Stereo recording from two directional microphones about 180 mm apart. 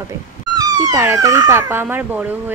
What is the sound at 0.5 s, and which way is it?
Speech, 20° right (ahead or behind).